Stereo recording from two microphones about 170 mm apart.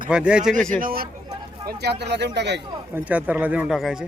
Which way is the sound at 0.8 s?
60° right (ahead or behind).